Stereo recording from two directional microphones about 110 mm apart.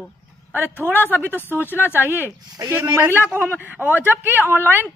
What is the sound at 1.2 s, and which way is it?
Speech, 20° left (ahead or behind).